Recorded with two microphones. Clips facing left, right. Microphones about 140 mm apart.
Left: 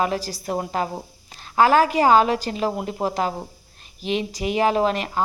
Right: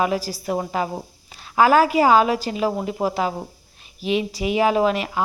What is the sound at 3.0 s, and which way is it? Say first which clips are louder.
Speech: right 2 dB; centre (ahead or behind).